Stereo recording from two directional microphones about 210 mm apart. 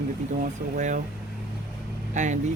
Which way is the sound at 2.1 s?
35° right (ahead or behind).